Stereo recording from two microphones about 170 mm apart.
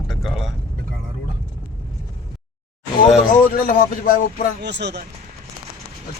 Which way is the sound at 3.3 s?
55° left (ahead or behind).